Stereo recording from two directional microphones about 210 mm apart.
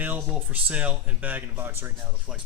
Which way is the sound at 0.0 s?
10° right (ahead or behind).